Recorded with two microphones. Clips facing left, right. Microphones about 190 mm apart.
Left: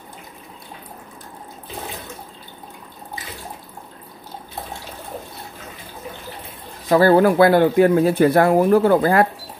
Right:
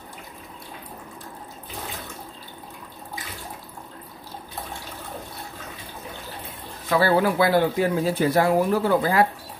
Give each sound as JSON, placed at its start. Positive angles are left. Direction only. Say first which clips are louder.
{"t": 6.9, "sound": "speech", "louder": "left 7 dB", "side_deg": 45}